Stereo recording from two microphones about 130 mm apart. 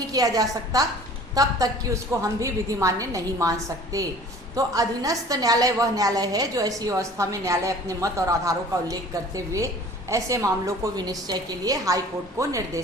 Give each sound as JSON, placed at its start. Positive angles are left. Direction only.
{"t": 0.1, "sound": "a woman's voice", "side_deg": -30}